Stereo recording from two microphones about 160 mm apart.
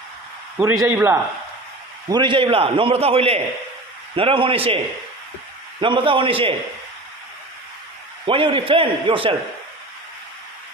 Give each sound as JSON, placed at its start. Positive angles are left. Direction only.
{"t": 0.6, "sound": "a man's voice", "side_deg": -20}
{"t": 2.0, "sound": "a man's voice", "side_deg": -30}
{"t": 5.8, "sound": "a man's voice", "side_deg": -30}
{"t": 8.3, "sound": "a man's voice", "side_deg": -35}